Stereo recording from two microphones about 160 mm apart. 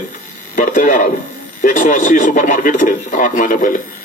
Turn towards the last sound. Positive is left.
turn(degrees=55)  # may be behind; listen again after turning